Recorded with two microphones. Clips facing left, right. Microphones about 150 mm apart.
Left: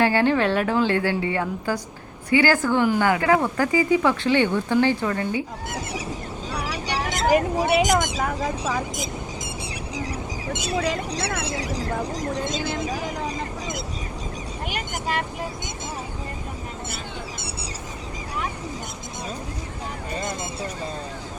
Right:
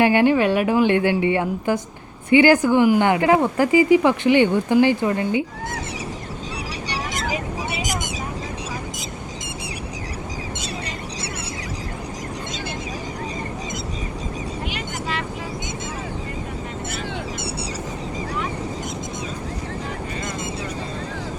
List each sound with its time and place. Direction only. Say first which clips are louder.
0.0 s speech: right 3 dB; 15° right (ahead or behind)
7.3 s speech: left 8 dB; 60° left (ahead or behind)